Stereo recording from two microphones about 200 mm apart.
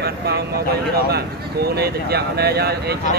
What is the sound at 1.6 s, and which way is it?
Speech, 50° right (ahead or behind).